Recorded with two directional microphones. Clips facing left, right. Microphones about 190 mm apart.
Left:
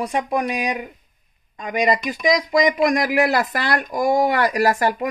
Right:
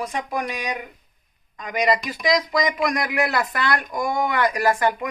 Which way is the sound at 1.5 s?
20° left (ahead or behind).